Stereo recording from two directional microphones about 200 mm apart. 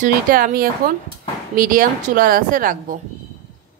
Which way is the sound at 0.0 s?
45° right (ahead or behind).